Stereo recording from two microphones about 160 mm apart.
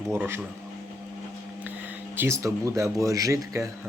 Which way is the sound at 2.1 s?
15° right (ahead or behind).